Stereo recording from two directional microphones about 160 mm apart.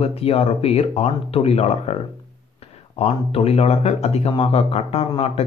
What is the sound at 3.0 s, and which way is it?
Speech, 40° left (ahead or behind).